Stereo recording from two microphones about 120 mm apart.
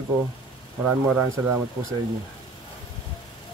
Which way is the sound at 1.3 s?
20° right (ahead or behind).